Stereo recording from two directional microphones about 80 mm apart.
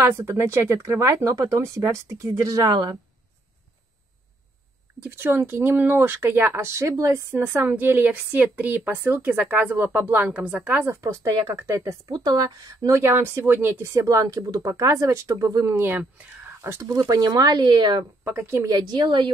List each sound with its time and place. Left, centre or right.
0.0 s speech: right
5.1 s speech: right
7.3 s a woman's voice: right
11.0 s speech: right
12.1 s speech: right
13.8 s speech: right
15.7 s a woman's voice: right
16.6 s speech: right
18.2 s speech: right
18.7 s a woman's voice: right